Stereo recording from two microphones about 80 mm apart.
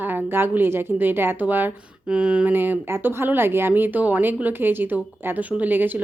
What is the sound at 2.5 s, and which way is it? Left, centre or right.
A woman's voice, right.